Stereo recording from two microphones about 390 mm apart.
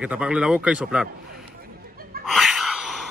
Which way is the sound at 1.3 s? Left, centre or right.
Right.